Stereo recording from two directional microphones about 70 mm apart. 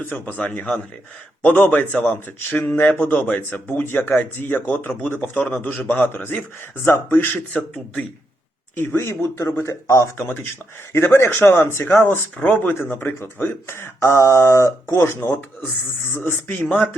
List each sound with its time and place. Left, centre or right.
0.0 s a man's voice: left
2.1 s speech: left
5.4 s speech: centre
5.6 s speech: left
7.5 s speech: centre
8.7 s speech: left